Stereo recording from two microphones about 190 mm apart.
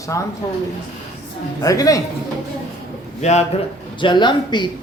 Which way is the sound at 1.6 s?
15° left (ahead or behind).